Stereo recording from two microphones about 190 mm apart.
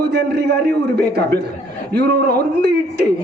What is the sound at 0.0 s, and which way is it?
A man's voice, 60° right (ahead or behind).